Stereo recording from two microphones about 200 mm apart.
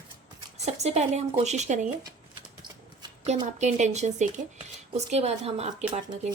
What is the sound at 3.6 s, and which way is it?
A woman's voice, 35° right (ahead or behind).